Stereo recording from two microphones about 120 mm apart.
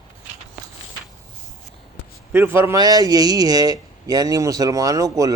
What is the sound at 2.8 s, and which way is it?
Speech, 30° right (ahead or behind).